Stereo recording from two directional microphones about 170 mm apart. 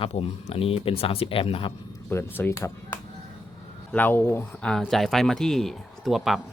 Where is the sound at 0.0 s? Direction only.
35° left (ahead or behind).